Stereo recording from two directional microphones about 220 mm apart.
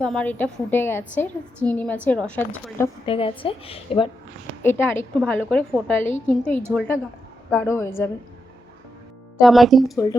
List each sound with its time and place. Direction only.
0.0 s a woman's voice: 5° left (ahead or behind)
3.1 s a woman's voice: 25° left (ahead or behind)
4.6 s a woman's voice: 10° left (ahead or behind)
9.4 s speech: centre (ahead or behind)